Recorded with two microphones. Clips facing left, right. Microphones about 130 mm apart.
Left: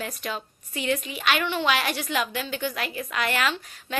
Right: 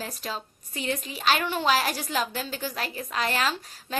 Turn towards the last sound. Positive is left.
turn(degrees=-35)  # may be behind; listen again after turning